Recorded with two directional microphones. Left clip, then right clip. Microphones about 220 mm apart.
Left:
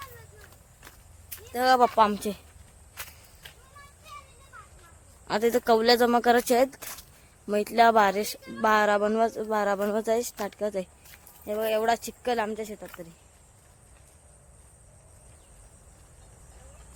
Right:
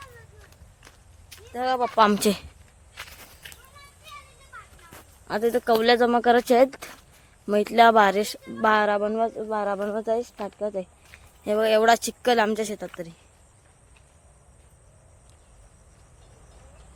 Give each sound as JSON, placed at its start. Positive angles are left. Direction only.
{"t": 0.8, "sound": "walk", "side_deg": 0}
{"t": 1.6, "sound": "speech", "side_deg": 40}
{"t": 2.1, "sound": "speech", "side_deg": -30}
{"t": 5.3, "sound": "speech", "side_deg": 0}
{"t": 11.4, "sound": "speech", "side_deg": -35}